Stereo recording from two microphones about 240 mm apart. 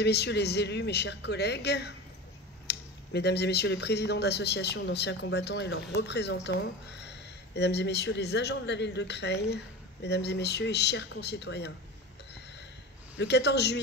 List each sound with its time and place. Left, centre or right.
0.0 s speech: left
13.2 s speech: left